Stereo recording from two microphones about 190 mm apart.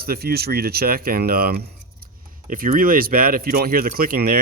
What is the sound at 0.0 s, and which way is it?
Speech, 55° right (ahead or behind).